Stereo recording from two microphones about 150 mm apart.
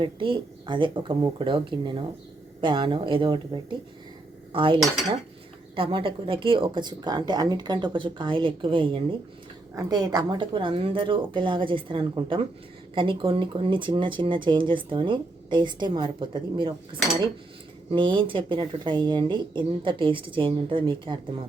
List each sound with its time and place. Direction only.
0.0 s speech: 35° right (ahead or behind)
9.7 s speech: 25° right (ahead or behind)